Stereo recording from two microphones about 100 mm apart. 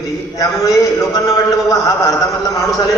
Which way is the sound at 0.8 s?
30° left (ahead or behind).